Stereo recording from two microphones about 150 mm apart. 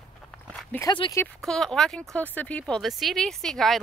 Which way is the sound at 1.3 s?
5° left (ahead or behind).